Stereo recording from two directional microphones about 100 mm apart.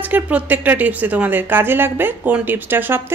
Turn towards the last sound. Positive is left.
turn(degrees=-20)  # may be behind; listen again after turning